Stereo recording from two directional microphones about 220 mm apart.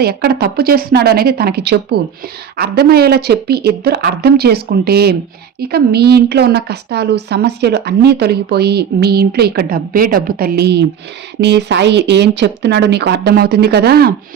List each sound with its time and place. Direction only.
0.0 s a woman's voice: 45° right (ahead or behind)